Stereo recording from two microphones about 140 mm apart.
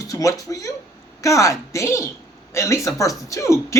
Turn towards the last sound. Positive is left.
turn(degrees=20)  # may be behind; listen again after turning